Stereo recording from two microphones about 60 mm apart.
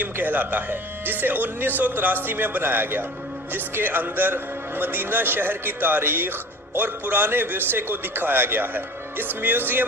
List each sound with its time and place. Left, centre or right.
0.0 s speech: right